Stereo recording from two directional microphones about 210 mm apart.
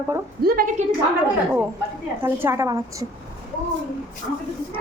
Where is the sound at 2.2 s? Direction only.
10° right (ahead or behind).